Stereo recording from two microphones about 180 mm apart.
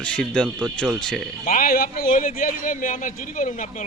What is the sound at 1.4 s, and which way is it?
Speech, 50° left (ahead or behind).